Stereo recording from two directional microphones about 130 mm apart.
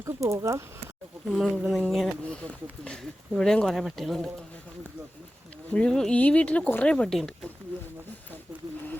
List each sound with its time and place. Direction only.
0.0 s speech: 25° right (ahead or behind)
1.3 s speech: 5° right (ahead or behind)
5.7 s speech: 5° left (ahead or behind)